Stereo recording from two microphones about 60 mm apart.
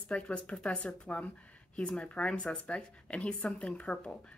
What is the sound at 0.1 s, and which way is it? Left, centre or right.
A woman's voice, centre.